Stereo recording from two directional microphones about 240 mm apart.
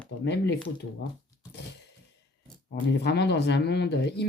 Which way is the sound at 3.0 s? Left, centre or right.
Left.